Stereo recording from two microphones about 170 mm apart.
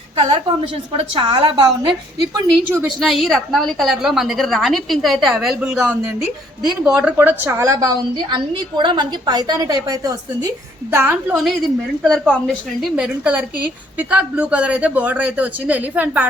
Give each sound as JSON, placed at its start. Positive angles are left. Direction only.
{"t": 0.2, "sound": "a woman's voice", "side_deg": -30}
{"t": 3.0, "sound": "a woman's voice", "side_deg": 0}
{"t": 12.0, "sound": "a woman's voice", "side_deg": 5}
{"t": 12.8, "sound": "a woman's voice", "side_deg": -5}